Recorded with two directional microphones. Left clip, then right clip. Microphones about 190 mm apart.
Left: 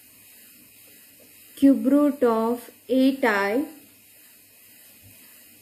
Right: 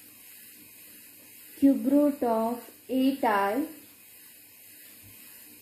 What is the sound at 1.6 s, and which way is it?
Speech, 35° left (ahead or behind).